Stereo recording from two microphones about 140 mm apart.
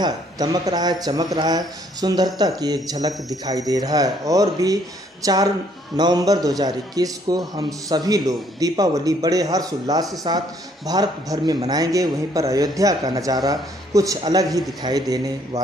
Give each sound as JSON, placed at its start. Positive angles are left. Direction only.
{"t": 0.0, "sound": "speech", "side_deg": -30}